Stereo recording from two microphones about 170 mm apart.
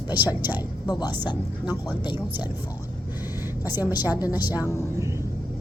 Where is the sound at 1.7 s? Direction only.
10° right (ahead or behind).